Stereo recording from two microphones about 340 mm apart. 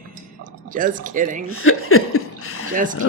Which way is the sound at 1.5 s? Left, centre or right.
Left.